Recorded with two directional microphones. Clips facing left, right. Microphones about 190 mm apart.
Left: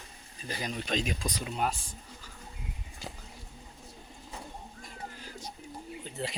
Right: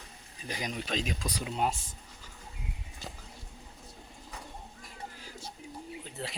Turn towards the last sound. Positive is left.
turn(degrees=0)  # may be behind; listen again after turning